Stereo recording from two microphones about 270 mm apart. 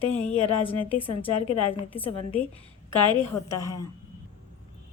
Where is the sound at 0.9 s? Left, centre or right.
Centre.